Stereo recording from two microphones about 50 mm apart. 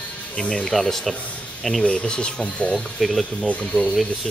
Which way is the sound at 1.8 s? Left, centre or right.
Centre.